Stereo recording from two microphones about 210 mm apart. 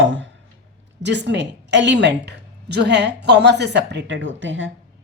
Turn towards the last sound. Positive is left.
turn(degrees=-60)  # may be behind; listen again after turning